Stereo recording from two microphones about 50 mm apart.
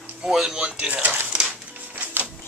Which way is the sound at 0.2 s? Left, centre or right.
Centre.